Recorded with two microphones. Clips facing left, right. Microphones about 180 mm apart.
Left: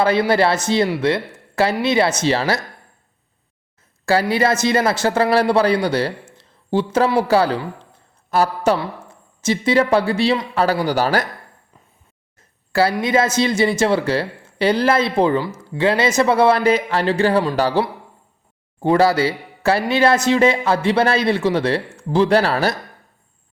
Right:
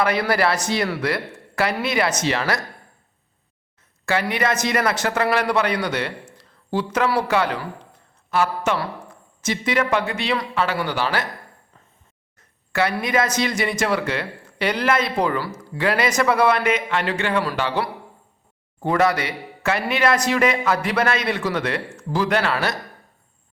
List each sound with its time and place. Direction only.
0.0 s speech: 25° left (ahead or behind)
4.0 s speech: 35° left (ahead or behind)
12.4 s speech: 30° left (ahead or behind)